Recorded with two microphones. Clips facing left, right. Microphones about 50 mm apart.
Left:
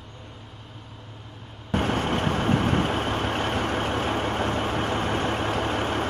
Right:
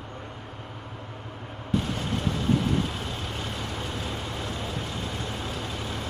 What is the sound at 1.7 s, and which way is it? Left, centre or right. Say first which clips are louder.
Vehicle: left 4 dB; left.